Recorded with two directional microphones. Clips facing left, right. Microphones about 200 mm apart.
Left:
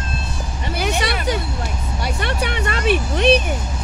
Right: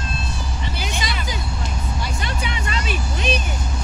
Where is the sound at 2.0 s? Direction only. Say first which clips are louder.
Left 8 dB; 65° left (ahead or behind).